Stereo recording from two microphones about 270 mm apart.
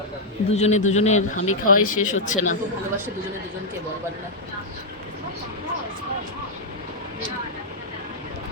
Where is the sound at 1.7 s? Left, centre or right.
Left.